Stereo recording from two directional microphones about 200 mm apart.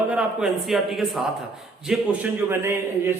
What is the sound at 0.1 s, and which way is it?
A man's voice, 5° right (ahead or behind).